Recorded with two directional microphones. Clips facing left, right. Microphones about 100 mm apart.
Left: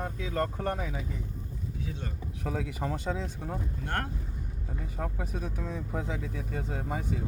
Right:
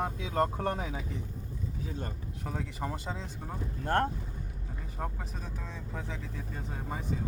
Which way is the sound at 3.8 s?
35° right (ahead or behind).